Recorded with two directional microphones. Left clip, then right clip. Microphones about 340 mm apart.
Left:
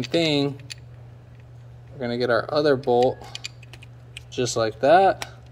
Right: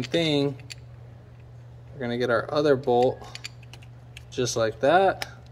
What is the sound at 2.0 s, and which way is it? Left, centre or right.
Speech, centre.